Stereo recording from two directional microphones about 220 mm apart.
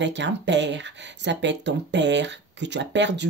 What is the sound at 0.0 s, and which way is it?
Speech, 55° right (ahead or behind).